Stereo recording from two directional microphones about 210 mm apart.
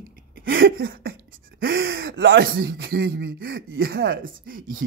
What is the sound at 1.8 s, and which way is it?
Speech, 65° right (ahead or behind).